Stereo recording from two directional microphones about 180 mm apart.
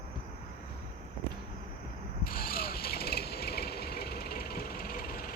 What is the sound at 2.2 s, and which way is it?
Vehicle, 55° left (ahead or behind).